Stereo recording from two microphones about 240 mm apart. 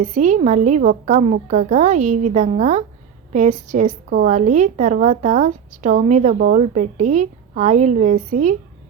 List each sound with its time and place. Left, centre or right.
0.0 s a woman's voice: right